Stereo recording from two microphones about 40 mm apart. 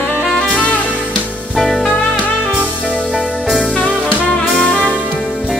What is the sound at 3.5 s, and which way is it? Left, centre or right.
Music, left.